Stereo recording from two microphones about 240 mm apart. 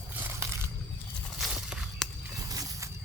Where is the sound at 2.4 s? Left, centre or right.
Centre.